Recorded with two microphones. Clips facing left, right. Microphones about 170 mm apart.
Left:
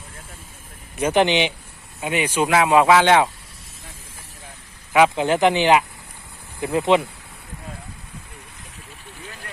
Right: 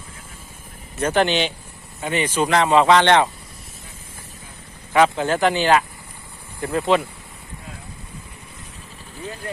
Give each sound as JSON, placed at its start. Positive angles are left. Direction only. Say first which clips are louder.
{"t": 0.9, "sound": "speech", "louder": "left 1 dB", "side_deg": 15}
{"t": 4.9, "sound": "speech", "louder": "left 1 dB", "side_deg": 15}